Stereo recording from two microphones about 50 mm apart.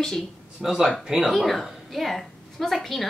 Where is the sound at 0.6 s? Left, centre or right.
Centre.